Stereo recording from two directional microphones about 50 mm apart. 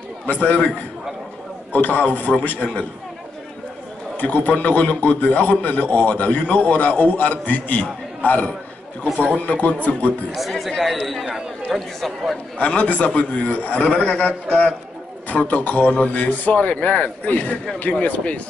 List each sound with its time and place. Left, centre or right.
0.3 s a man's voice: left
4.2 s a man's voice: left
10.5 s a man's voice: centre
12.5 s a man's voice: left